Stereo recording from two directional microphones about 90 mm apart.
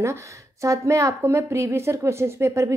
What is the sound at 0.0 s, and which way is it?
A woman's voice, 35° right (ahead or behind).